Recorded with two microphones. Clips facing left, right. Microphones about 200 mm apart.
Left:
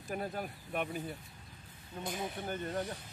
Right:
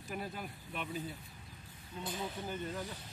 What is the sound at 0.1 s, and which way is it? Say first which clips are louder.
Speech: left 4 dB; 50° left (ahead or behind).